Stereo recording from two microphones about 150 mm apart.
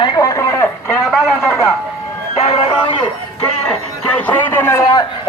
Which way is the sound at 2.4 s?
40° left (ahead or behind).